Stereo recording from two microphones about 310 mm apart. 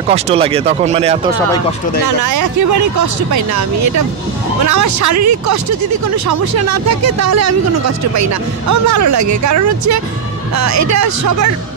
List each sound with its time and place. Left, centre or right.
0.1 s speech: centre
2.0 s speech: right